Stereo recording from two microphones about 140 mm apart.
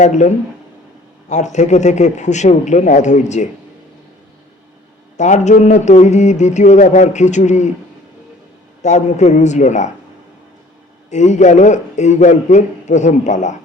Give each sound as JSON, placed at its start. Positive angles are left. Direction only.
{"t": 0.0, "sound": "speech", "side_deg": 60}
{"t": 5.1, "sound": "speech", "side_deg": 60}
{"t": 8.8, "sound": "speech", "side_deg": 55}
{"t": 11.1, "sound": "speech", "side_deg": 60}